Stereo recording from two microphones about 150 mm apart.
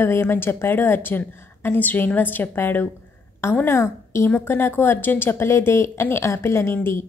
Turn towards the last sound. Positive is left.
turn(degrees=15)  # may be behind; listen again after turning